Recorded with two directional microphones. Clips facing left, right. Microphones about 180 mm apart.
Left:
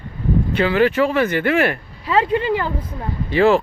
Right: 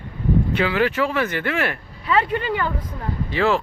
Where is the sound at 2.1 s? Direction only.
30° left (ahead or behind).